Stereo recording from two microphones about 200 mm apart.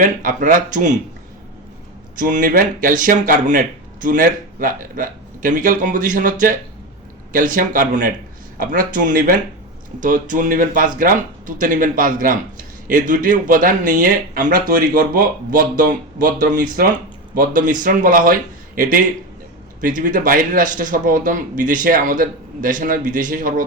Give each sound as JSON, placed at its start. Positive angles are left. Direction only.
{"t": 0.0, "sound": "a man's voice", "side_deg": -40}
{"t": 2.1, "sound": "a man's voice", "side_deg": -45}